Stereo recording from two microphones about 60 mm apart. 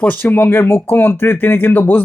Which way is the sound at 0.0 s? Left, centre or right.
Left.